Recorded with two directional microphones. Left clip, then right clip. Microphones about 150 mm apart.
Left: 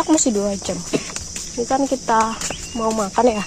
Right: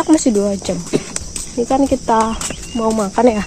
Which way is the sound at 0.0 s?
15° right (ahead or behind).